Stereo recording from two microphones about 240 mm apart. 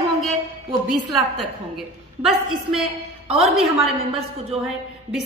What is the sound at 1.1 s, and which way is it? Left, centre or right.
A woman's voice, centre.